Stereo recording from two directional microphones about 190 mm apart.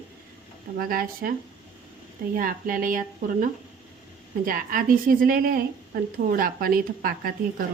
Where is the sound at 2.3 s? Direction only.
45° right (ahead or behind).